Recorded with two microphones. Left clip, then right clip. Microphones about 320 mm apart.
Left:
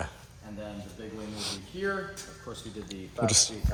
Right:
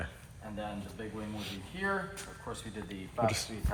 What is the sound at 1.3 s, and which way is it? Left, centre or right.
Speech, centre.